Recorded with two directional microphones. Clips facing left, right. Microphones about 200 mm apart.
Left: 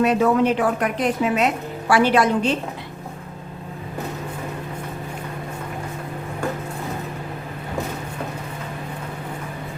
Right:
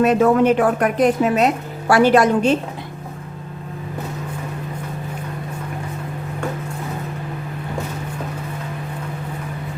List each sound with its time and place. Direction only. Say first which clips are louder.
0.0 s a woman's voice: right 3 dB; 50° right (ahead or behind)